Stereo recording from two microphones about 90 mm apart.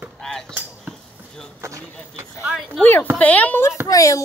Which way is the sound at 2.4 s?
10° right (ahead or behind).